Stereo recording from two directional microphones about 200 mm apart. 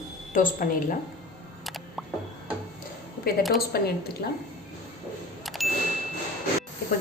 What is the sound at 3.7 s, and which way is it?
Speech, 50° left (ahead or behind).